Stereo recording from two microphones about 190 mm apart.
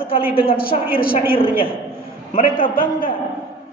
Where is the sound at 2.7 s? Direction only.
45° left (ahead or behind).